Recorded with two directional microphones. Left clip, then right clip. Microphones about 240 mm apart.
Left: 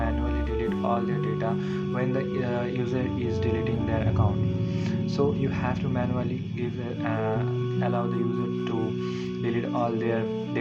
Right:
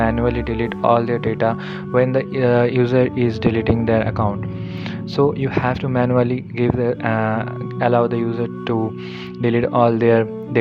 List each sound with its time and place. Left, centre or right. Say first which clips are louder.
0.0 s speech: right 11 dB; right
9.4 s speech: right 13 dB; right